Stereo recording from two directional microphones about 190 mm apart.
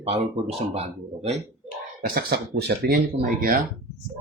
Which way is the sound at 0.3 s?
35° right (ahead or behind).